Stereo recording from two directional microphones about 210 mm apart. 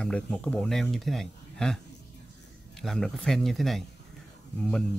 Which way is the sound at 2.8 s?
Centre (ahead or behind).